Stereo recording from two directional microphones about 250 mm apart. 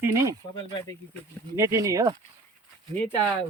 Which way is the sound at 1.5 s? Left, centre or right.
Centre.